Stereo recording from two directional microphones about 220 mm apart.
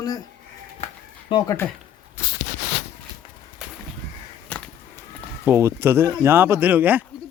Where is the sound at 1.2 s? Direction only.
20° left (ahead or behind).